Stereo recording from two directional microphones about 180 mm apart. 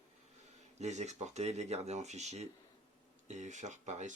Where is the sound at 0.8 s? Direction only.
40° right (ahead or behind).